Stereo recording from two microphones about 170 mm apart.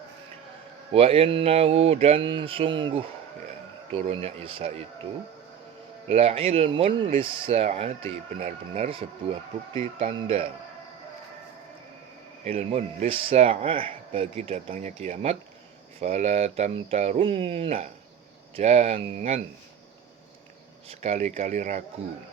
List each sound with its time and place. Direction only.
0.9 s speech: 35° right (ahead or behind)
6.1 s speech: 35° right (ahead or behind)
8.4 s speech: 50° right (ahead or behind)
9.7 s speech: 35° right (ahead or behind)
12.5 s speech: 40° right (ahead or behind)
20.8 s speech: 40° right (ahead or behind)